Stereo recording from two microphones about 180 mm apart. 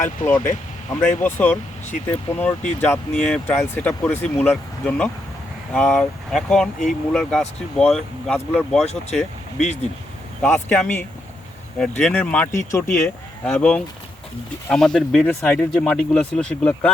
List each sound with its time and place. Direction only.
0.0 s speech: 15° left (ahead or behind)
9.6 s speech: 40° left (ahead or behind)
10.4 s speech: 10° left (ahead or behind)